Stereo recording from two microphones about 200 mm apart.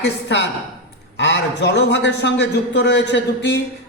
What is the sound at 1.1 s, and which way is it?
A man's voice, 60° left (ahead or behind).